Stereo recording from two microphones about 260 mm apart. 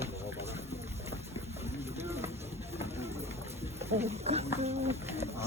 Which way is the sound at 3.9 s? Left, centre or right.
Right.